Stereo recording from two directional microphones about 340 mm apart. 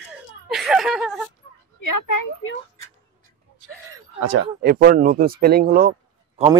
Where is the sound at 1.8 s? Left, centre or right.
Left.